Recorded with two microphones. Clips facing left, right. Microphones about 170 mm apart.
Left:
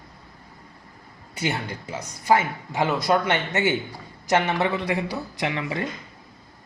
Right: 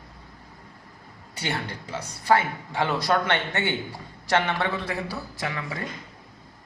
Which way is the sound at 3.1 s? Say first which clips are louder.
Left 2 dB; 5° left (ahead or behind).